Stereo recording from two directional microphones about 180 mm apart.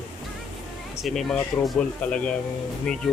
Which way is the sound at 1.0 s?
Centre (ahead or behind).